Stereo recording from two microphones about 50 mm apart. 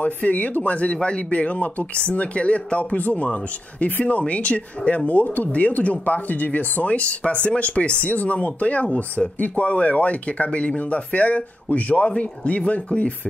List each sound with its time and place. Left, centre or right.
0.0 s speech: left